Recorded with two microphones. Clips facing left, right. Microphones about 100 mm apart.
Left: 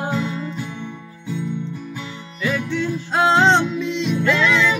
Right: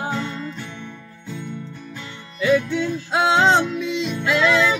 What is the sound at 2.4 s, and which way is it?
Music, centre (ahead or behind).